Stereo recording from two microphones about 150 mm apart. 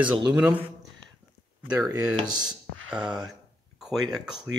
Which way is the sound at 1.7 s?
5° right (ahead or behind).